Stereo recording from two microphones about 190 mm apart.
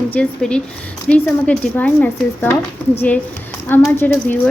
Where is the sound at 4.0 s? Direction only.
10° left (ahead or behind).